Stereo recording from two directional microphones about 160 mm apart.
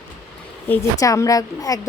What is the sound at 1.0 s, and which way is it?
Speech, 20° left (ahead or behind).